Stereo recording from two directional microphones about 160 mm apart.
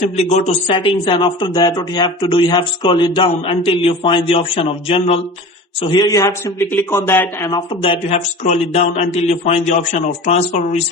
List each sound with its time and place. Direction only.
0.2 s speech: 45° left (ahead or behind)
5.8 s a man's voice: 25° left (ahead or behind)
7.5 s speech: 35° left (ahead or behind); by 10.8 s 50° left (ahead or behind)